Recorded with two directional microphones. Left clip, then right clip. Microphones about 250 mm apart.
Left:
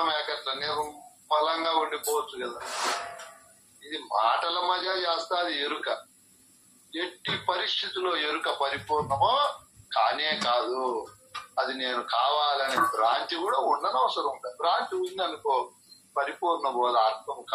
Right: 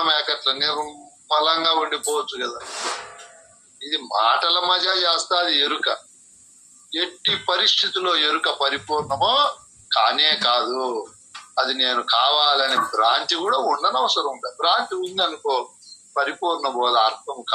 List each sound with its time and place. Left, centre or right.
0.0 s speech: right
3.9 s speech: right